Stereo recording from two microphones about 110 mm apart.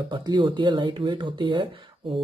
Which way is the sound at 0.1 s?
45° right (ahead or behind).